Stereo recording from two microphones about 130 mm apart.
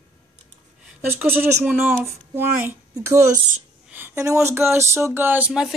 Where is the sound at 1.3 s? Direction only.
15° right (ahead or behind).